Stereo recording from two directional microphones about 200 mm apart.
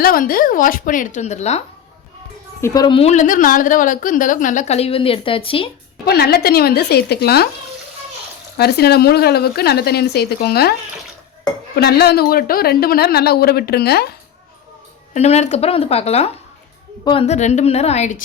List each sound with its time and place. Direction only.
0.0 s speech: 45° left (ahead or behind)
2.6 s a woman's voice: 15° left (ahead or behind)
6.1 s speech: 50° left (ahead or behind)
8.5 s speech: 55° left (ahead or behind)
15.1 s a woman's voice: 35° left (ahead or behind)